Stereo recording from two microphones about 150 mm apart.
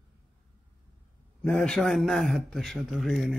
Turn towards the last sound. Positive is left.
turn(degrees=0)  # may be behind; listen again after turning